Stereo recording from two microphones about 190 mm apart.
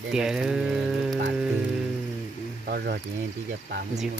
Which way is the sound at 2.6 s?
55° right (ahead or behind).